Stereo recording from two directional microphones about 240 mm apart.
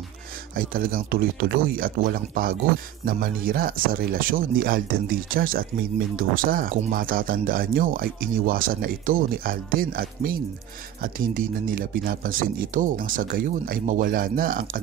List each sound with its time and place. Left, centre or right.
0.6 s speech: right